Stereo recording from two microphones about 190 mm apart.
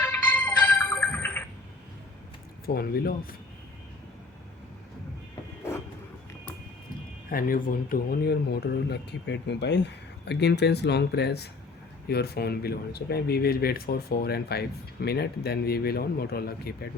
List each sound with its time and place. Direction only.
0.0 s music: 10° left (ahead or behind)
2.6 s speech: 55° left (ahead or behind)
7.3 s speech: 50° left (ahead or behind)